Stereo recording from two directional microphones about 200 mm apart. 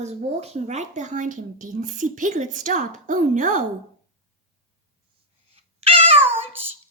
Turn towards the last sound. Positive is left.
turn(degrees=-10)  # may be behind; listen again after turning